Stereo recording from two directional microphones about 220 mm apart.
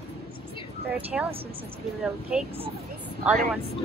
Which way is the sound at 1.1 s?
5° right (ahead or behind).